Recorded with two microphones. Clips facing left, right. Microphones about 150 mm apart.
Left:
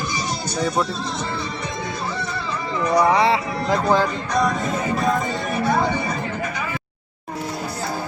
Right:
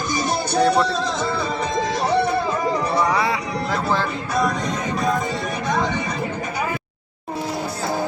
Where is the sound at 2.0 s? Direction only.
60° right (ahead or behind).